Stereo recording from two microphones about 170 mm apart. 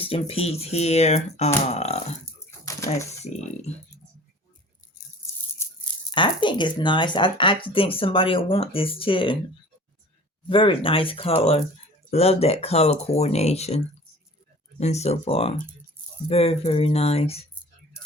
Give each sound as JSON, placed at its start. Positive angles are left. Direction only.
{"t": 0.0, "sound": "speech", "side_deg": 35}
{"t": 6.1, "sound": "speech", "side_deg": 30}
{"t": 10.5, "sound": "speech", "side_deg": 30}